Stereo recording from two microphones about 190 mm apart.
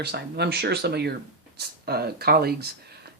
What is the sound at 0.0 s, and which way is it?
Speech, 60° right (ahead or behind).